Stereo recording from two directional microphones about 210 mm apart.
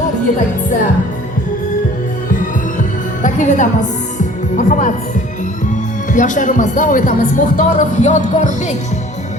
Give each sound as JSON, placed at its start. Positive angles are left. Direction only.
{"t": 3.2, "sound": "speech", "side_deg": 35}